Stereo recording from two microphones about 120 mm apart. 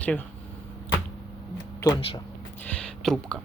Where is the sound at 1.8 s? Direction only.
35° left (ahead or behind).